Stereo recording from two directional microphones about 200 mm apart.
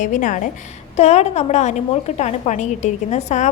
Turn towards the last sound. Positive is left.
turn(degrees=35)  # may be behind; listen again after turning